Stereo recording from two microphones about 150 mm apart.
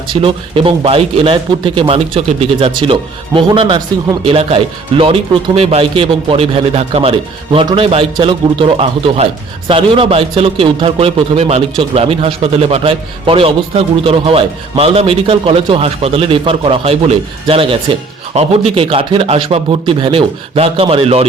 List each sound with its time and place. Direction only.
0.1 s a man's voice: 35° right (ahead or behind)